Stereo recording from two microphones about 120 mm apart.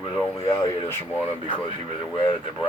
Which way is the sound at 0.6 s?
15° left (ahead or behind).